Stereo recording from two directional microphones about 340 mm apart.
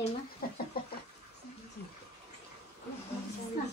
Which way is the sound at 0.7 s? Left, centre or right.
Left.